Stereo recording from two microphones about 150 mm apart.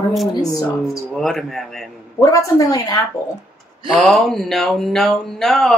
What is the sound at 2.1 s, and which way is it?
Speech, 20° left (ahead or behind).